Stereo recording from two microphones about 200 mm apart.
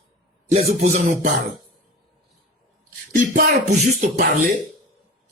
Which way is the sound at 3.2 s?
45° right (ahead or behind).